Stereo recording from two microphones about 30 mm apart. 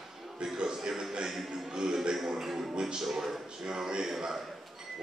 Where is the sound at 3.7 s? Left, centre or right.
Right.